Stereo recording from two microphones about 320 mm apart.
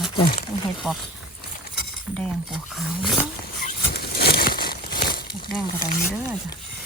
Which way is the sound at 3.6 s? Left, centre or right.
Left.